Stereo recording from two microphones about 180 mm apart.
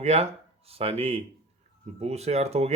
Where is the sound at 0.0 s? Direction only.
35° right (ahead or behind).